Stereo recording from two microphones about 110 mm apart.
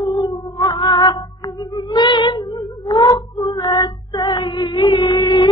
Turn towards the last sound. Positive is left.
turn(degrees=45)  # may be behind; listen again after turning